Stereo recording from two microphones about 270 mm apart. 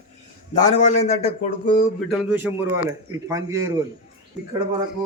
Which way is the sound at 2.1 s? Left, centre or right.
Centre.